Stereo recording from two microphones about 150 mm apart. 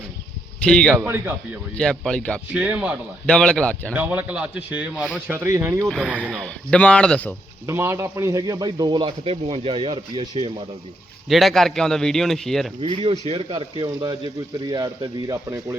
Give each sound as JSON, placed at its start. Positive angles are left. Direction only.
{"t": 0.6, "sound": "a man's voice", "side_deg": 5}
{"t": 1.0, "sound": "speech", "side_deg": -15}
{"t": 1.7, "sound": "speech", "side_deg": 5}
{"t": 2.5, "sound": "speech", "side_deg": -10}
{"t": 3.2, "sound": "speech", "side_deg": 5}
{"t": 3.9, "sound": "speech", "side_deg": -10}
{"t": 5.9, "sound": "speech", "side_deg": -5}
{"t": 6.4, "sound": "speech", "side_deg": 5}
{"t": 7.7, "sound": "speech", "side_deg": -15}
{"t": 11.3, "sound": "a man's voice", "side_deg": 0}
{"t": 12.8, "sound": "speech", "side_deg": -40}